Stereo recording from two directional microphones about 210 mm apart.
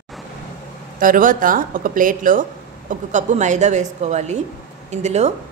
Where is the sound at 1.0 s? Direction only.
40° right (ahead or behind).